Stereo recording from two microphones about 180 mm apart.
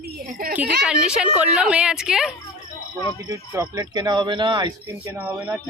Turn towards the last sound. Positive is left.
turn(degrees=-15)  # may be behind; listen again after turning